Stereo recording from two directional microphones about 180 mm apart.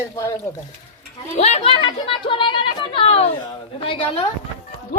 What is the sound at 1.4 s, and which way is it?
A woman's voice, 35° left (ahead or behind).